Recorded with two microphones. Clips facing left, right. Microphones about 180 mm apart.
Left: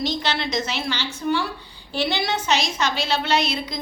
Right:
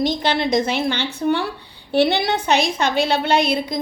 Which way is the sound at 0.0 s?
55° right (ahead or behind).